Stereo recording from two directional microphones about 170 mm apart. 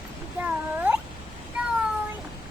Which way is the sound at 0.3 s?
10° right (ahead or behind).